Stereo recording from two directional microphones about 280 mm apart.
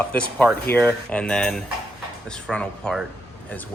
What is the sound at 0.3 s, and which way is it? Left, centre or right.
Speech, centre.